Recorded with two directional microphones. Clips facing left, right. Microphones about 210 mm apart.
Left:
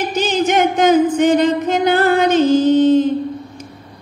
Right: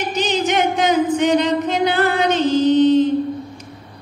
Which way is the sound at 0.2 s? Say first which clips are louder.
Left 3 dB; 45° left (ahead or behind).